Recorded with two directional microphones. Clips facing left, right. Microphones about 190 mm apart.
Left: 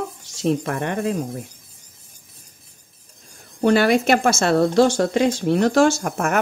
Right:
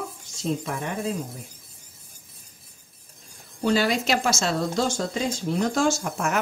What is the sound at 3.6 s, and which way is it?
Speech, 60° left (ahead or behind).